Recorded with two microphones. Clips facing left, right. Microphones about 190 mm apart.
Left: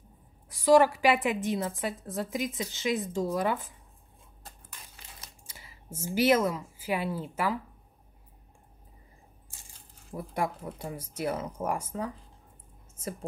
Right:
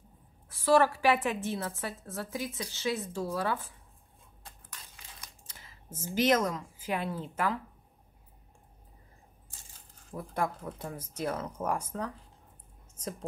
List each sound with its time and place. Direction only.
0.5 s a woman's voice: 15° left (ahead or behind)
5.5 s a woman's voice: 10° left (ahead or behind)
10.1 s a woman's voice: 10° left (ahead or behind)